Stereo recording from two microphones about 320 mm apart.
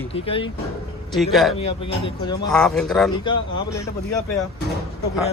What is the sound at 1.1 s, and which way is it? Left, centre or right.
A man's voice, centre.